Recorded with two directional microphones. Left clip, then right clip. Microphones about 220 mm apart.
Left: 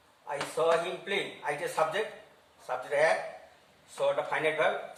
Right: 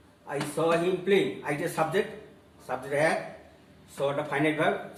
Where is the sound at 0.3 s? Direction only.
10° left (ahead or behind).